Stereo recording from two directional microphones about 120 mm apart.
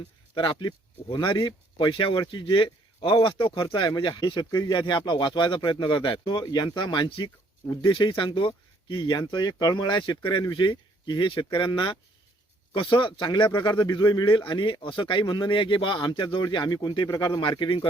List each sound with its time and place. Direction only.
0.3 s speech: 45° left (ahead or behind)